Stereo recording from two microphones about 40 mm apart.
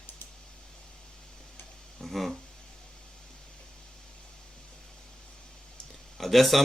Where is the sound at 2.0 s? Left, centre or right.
Centre.